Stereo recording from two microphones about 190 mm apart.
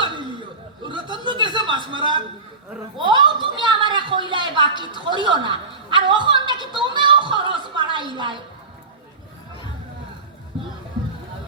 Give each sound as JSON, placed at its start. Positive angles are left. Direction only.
{"t": 0.8, "sound": "chuckle", "side_deg": -25}
{"t": 3.0, "sound": "a sound", "side_deg": -25}
{"t": 4.3, "sound": "a man's voice", "side_deg": -25}